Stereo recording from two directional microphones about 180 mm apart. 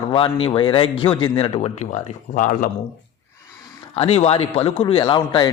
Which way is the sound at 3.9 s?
35° left (ahead or behind).